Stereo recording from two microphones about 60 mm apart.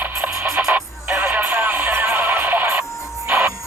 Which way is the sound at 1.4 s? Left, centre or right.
Right.